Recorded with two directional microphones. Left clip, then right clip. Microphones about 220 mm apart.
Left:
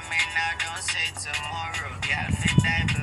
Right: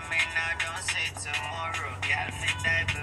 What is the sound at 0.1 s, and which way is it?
Music, 45° left (ahead or behind).